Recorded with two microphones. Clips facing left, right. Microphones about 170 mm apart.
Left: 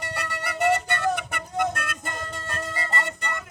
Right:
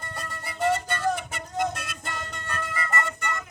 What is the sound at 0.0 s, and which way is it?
Music, 75° left (ahead or behind).